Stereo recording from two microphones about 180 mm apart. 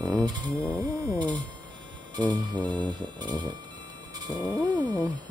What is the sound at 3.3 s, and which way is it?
Cat, 25° right (ahead or behind).